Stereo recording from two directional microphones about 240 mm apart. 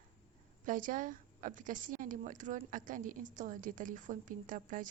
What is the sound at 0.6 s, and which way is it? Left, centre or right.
A woman's voice, right.